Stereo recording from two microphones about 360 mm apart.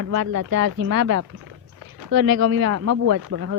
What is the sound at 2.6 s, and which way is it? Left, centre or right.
Speech, right.